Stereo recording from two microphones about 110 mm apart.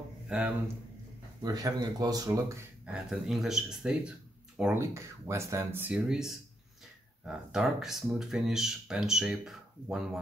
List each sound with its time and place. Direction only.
0.3 s speech: 10° right (ahead or behind)
1.4 s speech: 35° right (ahead or behind)
2.8 s speech: 5° right (ahead or behind)
4.7 s speech: 25° right (ahead or behind); by 10.2 s 5° right (ahead or behind)